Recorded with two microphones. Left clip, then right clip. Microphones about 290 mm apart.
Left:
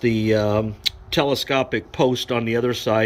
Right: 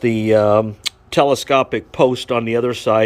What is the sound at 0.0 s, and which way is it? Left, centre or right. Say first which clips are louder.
Speech: right 6 dB; centre.